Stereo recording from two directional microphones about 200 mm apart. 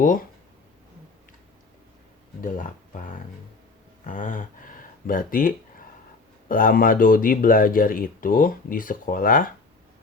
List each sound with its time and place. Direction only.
0.0 s speech: 40° left (ahead or behind)
2.4 s speech: 40° left (ahead or behind)